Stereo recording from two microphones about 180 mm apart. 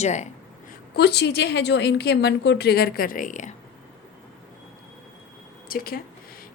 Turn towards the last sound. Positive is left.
turn(degrees=55)  # may be behind; listen again after turning